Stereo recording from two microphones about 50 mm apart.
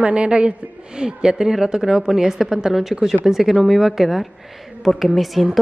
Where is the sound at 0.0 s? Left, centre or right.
Right.